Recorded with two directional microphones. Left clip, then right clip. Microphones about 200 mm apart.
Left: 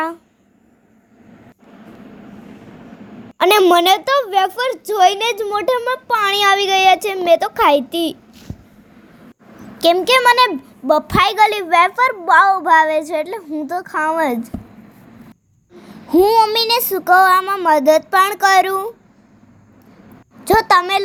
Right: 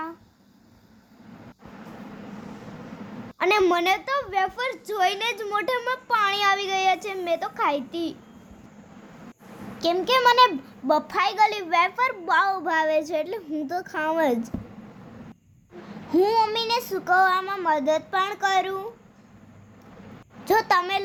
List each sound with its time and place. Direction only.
3.3 s a woman's voice: 40° left (ahead or behind)
9.7 s a woman's voice: 35° left (ahead or behind)
16.0 s a woman's voice: 25° left (ahead or behind)
20.4 s a woman's voice: 25° left (ahead or behind)